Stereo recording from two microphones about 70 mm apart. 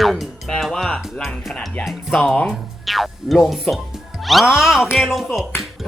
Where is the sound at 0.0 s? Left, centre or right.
Centre.